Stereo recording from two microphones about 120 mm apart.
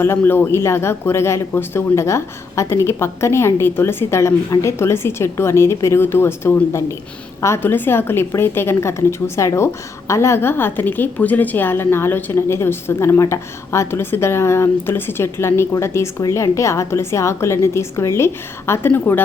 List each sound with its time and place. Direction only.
0.0 s a woman's voice: 20° left (ahead or behind)